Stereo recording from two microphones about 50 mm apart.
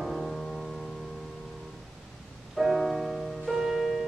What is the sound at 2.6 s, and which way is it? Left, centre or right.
Music, centre.